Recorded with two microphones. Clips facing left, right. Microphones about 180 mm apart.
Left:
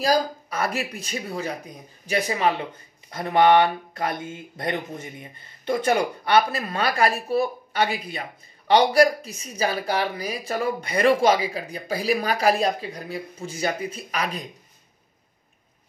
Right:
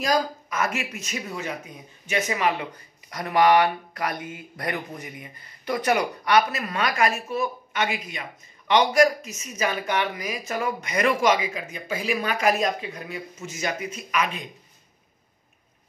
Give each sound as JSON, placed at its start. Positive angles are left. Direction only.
{"t": 0.0, "sound": "speech", "side_deg": 35}